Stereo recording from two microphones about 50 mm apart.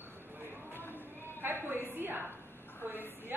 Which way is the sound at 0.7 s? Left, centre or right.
Left.